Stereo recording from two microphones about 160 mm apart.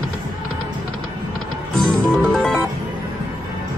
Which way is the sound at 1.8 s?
5° left (ahead or behind).